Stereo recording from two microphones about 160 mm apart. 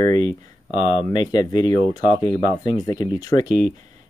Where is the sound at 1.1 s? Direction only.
25° left (ahead or behind).